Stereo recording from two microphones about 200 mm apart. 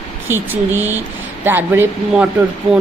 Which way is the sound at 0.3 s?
10° right (ahead or behind).